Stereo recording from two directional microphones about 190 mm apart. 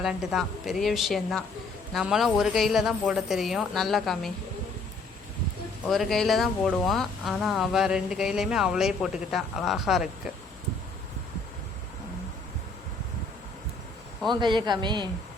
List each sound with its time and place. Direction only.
0.0 s speech: 5° right (ahead or behind)
5.9 s speech: centre (ahead or behind)
14.3 s speech: 25° right (ahead or behind)